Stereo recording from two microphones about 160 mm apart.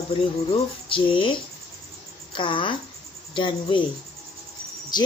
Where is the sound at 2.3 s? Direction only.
30° left (ahead or behind).